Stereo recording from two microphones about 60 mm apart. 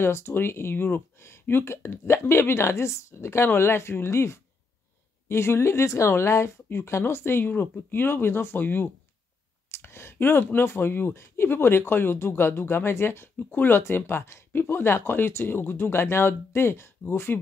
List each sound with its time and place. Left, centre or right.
0.0 s speech: left
9.7 s a sound: left
10.1 s speech: left